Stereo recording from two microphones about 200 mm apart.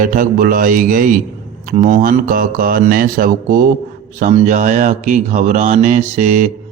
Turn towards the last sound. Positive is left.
turn(degrees=-35)  # may be behind; listen again after turning